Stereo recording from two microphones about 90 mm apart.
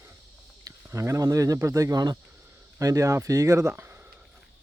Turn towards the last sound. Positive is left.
turn(degrees=-25)  # may be behind; listen again after turning